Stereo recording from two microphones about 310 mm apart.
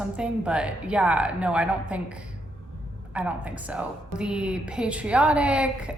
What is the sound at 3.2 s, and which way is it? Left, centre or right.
A woman's voice, centre.